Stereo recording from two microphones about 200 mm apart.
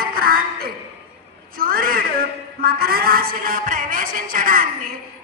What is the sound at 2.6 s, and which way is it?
A woman's voice, 50° right (ahead or behind).